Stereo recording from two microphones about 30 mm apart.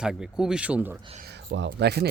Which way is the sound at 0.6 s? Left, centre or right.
Right.